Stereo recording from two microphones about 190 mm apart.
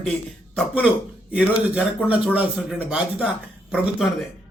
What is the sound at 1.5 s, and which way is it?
A man's voice, 5° right (ahead or behind).